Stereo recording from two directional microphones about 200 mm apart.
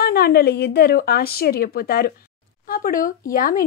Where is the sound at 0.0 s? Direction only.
50° left (ahead or behind).